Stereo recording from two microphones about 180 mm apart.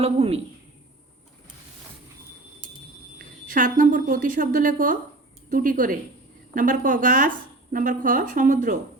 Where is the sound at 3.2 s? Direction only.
50° right (ahead or behind).